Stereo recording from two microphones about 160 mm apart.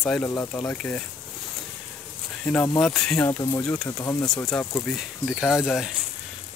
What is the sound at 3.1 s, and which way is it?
Speech, 15° left (ahead or behind).